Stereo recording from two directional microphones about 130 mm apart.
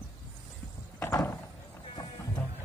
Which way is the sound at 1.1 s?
20° left (ahead or behind).